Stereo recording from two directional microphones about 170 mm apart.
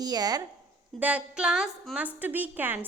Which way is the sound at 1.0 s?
10° right (ahead or behind).